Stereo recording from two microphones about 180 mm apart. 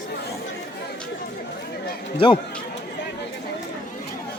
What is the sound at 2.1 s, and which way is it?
Speech, 30° left (ahead or behind).